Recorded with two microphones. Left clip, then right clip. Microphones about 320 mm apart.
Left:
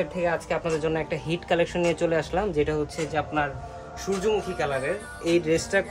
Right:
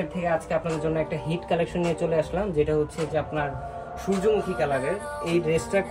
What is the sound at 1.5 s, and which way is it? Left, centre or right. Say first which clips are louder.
Speech: left 2 dB; centre.